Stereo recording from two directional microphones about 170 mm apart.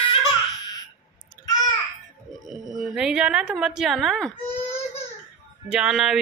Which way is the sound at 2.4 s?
Centre (ahead or behind).